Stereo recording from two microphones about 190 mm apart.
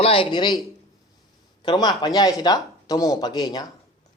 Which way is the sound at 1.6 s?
20° left (ahead or behind).